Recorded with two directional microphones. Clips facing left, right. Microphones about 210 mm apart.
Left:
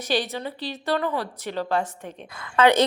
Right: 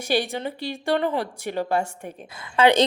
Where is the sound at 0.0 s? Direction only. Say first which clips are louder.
Right 2 dB; 10° right (ahead or behind).